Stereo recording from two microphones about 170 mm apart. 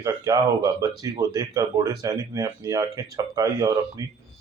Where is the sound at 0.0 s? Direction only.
20° right (ahead or behind).